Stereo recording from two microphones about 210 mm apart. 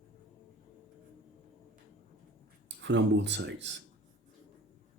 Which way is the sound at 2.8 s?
60° right (ahead or behind).